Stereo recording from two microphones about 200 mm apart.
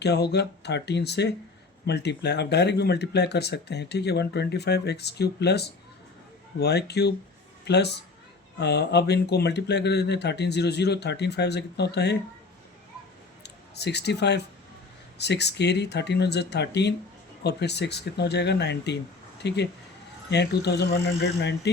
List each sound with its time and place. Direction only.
0.0 s a woman's voice: 55° left (ahead or behind)
13.4 s speech: 55° left (ahead or behind)